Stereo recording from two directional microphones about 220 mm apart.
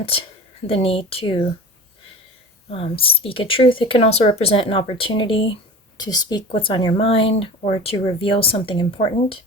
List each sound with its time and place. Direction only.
0.7 s speech: 25° left (ahead or behind)
2.6 s speech: 25° left (ahead or behind)